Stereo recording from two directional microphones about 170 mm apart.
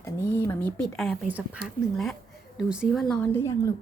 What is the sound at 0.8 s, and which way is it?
Speech, centre (ahead or behind).